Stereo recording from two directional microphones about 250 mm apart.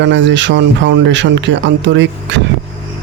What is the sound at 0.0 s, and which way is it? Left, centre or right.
Speech, right.